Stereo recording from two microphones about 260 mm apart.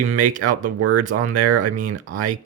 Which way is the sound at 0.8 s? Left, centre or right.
Right.